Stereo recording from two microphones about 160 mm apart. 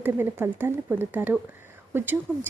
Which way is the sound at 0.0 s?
15° right (ahead or behind).